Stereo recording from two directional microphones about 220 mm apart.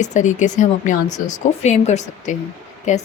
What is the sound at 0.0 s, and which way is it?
Speech, 35° left (ahead or behind).